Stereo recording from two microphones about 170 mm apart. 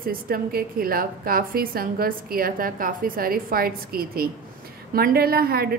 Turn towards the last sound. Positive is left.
turn(degrees=-65)  # may be behind; listen again after turning